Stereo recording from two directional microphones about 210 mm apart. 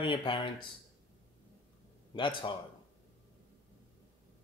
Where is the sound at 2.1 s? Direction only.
25° left (ahead or behind).